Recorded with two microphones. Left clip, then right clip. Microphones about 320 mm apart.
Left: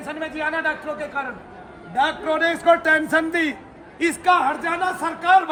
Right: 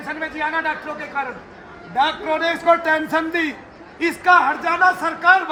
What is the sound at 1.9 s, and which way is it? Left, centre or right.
A man's voice, centre.